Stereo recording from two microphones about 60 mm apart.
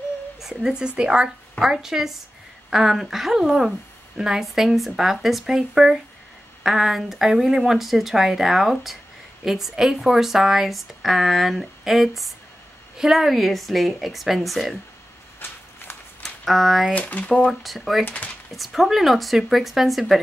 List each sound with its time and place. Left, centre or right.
0.4 s speech: centre
15.4 s a sound: left
16.2 s a sound: centre
16.9 s speech: left
17.5 s speech: centre
18.0 s speech: left
18.6 s speech: centre